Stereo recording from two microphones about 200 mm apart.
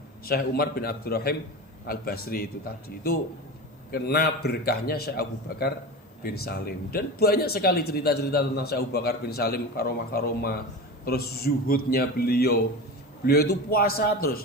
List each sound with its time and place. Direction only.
0.3 s speech: 50° left (ahead or behind)